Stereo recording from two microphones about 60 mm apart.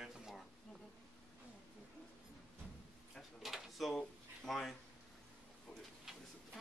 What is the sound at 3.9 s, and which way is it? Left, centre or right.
Speech, centre.